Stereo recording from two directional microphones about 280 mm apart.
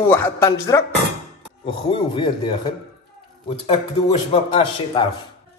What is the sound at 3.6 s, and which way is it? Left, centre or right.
A man's voice, centre.